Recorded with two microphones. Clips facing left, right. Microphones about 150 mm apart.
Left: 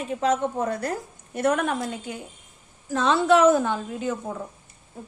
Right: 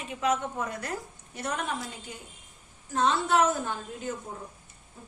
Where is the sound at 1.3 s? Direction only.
55° left (ahead or behind).